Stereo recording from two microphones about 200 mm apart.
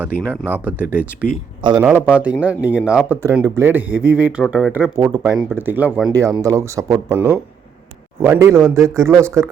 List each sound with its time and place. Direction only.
0.4 s speech: 10° right (ahead or behind)
1.6 s a man's voice: 25° right (ahead or behind)
2.0 s speech: 5° right (ahead or behind)